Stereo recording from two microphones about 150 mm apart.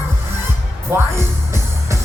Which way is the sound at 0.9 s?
15° right (ahead or behind).